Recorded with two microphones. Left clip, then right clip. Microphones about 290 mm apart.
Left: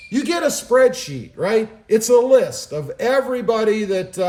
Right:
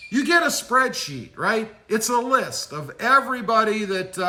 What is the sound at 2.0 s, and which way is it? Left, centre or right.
Music, centre.